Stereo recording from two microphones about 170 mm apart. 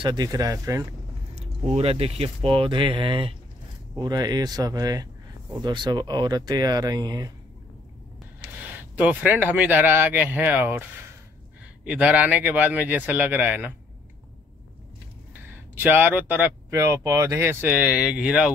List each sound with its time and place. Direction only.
0.0 s speech: 25° right (ahead or behind)
1.3 s speech: 35° right (ahead or behind); by 7.3 s 20° right (ahead or behind)
8.6 s speech: 10° right (ahead or behind)
15.8 s speech: 10° right (ahead or behind)